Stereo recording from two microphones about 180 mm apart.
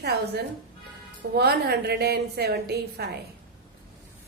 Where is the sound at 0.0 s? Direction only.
65° right (ahead or behind).